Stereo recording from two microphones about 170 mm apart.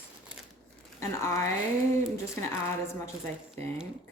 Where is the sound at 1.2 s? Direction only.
15° left (ahead or behind).